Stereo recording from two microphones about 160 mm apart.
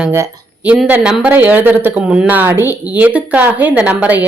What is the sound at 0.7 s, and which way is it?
A woman's voice, 5° right (ahead or behind).